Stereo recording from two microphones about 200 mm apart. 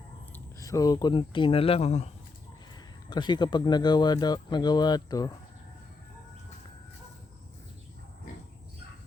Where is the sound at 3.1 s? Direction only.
20° left (ahead or behind).